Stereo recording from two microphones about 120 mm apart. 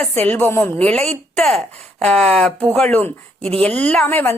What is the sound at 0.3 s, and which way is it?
Speech, 15° left (ahead or behind).